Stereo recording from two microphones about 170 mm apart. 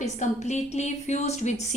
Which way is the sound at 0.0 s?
45° left (ahead or behind).